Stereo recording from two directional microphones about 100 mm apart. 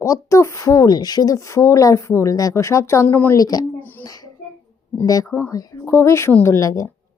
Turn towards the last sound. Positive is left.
turn(degrees=30)  # may be behind; listen again after turning